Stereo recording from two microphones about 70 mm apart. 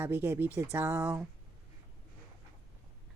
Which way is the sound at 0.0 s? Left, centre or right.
Right.